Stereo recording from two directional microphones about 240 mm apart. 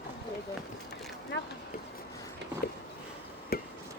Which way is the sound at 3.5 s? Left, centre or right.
Left.